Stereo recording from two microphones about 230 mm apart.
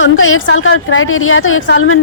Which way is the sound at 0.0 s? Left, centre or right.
Left.